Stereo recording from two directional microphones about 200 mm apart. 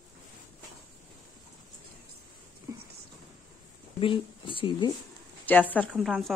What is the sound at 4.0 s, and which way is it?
Speech, 25° left (ahead or behind).